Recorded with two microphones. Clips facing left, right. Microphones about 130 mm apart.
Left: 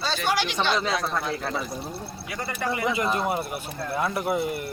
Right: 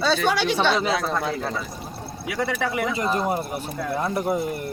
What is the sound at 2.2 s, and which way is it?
Speech, 90° right.